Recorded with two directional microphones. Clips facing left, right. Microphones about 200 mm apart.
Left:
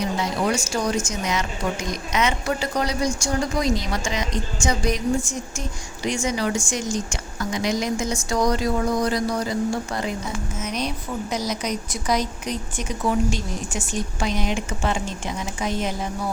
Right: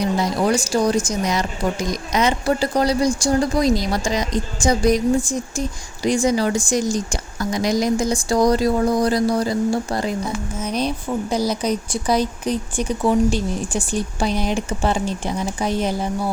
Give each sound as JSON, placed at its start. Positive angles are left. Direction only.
{"t": 0.2, "sound": "speech", "side_deg": -35}